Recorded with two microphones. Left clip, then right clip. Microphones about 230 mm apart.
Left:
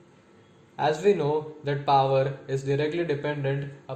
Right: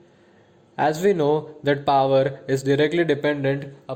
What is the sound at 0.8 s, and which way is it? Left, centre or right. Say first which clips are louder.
Speech: right 3 dB; right.